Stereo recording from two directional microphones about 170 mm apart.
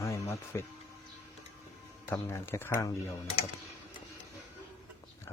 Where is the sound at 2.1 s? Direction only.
15° left (ahead or behind).